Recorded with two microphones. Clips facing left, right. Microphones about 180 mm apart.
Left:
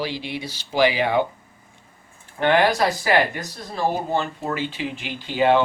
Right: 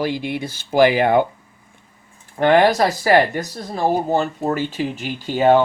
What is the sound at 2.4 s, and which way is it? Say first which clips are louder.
Speech: right 4 dB; 40° right (ahead or behind).